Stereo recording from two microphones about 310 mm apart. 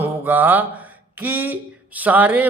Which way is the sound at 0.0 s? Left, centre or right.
Centre.